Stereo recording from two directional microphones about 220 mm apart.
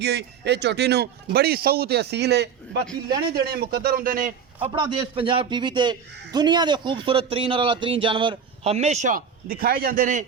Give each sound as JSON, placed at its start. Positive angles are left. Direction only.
{"t": 0.0, "sound": "speech", "side_deg": -50}
{"t": 4.7, "sound": "a man's voice", "side_deg": -20}